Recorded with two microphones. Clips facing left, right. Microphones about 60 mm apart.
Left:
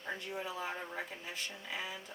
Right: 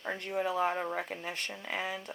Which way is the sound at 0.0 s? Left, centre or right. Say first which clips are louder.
Right 7 dB; right.